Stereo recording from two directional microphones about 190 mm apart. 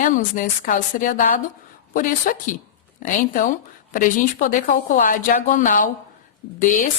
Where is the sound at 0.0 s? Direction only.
45° left (ahead or behind).